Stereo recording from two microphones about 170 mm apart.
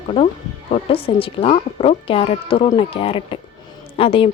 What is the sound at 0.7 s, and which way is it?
Speech, 35° left (ahead or behind).